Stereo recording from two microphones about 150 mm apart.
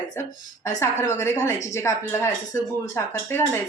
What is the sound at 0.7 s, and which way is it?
Speech, 20° left (ahead or behind).